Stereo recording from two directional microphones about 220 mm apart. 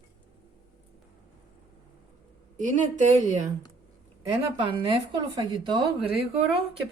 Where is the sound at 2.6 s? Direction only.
35° right (ahead or behind).